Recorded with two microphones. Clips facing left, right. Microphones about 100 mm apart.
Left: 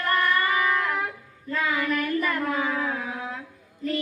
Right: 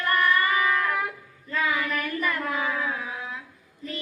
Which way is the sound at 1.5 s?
35° left (ahead or behind).